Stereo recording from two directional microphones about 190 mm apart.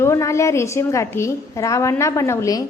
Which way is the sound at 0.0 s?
15° left (ahead or behind).